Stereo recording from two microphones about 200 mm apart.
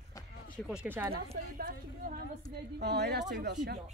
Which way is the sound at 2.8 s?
55° right (ahead or behind).